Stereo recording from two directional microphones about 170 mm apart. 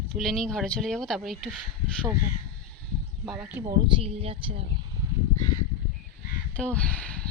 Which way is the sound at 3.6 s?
35° right (ahead or behind).